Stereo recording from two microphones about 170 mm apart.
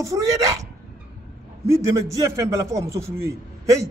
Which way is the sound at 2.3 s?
20° right (ahead or behind).